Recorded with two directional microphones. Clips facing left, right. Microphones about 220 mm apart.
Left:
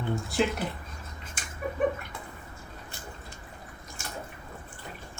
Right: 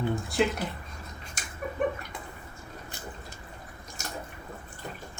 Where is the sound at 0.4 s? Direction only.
Centre (ahead or behind).